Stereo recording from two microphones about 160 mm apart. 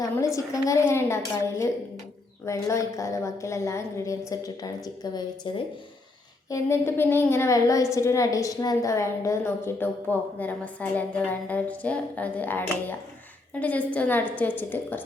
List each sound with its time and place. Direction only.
0.3 s a woman's voice: 20° left (ahead or behind)
6.5 s a woman's voice: 15° left (ahead or behind)